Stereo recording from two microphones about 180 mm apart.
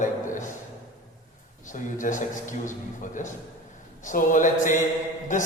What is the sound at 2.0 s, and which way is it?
Speech, 45° left (ahead or behind).